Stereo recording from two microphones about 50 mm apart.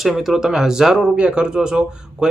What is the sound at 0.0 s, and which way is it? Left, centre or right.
Speech, centre.